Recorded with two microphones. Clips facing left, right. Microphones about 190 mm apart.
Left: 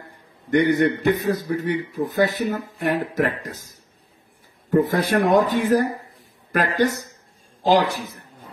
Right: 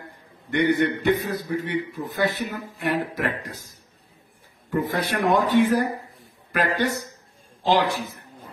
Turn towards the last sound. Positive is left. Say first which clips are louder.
# left 3 dB
turn(degrees=40)  # may be behind; listen again after turning